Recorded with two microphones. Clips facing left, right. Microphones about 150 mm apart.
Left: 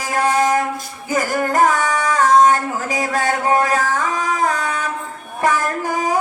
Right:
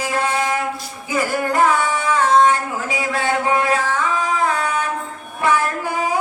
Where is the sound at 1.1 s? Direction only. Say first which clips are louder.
Left 1 dB; 45° left (ahead or behind).